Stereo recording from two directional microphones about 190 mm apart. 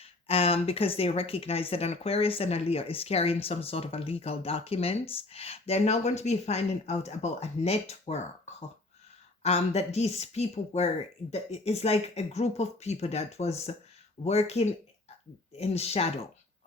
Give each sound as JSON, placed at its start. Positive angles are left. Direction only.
{"t": 0.0, "sound": "speech", "side_deg": 30}
{"t": 9.4, "sound": "speech", "side_deg": 35}